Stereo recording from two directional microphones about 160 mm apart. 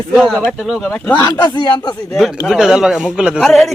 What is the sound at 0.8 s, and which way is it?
Speech, 10° left (ahead or behind).